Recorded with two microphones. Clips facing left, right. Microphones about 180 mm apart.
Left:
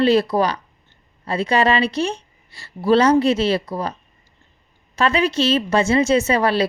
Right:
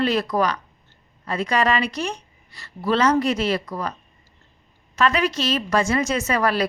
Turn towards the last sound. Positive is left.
turn(degrees=30)  # may be behind; listen again after turning